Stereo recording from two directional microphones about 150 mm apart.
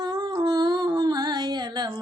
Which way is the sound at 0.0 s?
25° right (ahead or behind).